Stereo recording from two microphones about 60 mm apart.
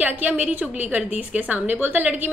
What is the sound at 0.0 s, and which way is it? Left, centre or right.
A woman's voice, right.